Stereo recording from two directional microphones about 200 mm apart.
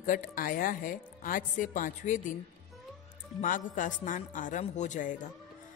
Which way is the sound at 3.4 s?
40° left (ahead or behind).